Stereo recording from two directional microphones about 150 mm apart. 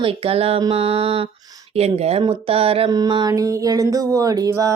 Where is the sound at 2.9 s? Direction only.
30° right (ahead or behind).